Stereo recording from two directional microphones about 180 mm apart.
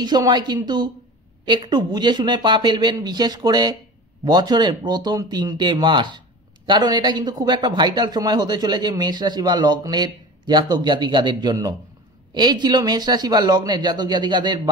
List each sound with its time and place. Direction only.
0.0 s speech: 25° right (ahead or behind)